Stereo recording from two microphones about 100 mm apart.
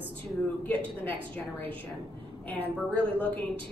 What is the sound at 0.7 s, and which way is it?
A woman's voice, 20° left (ahead or behind).